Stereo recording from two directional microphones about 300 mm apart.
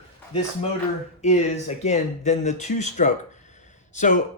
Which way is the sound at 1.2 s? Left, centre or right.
Left.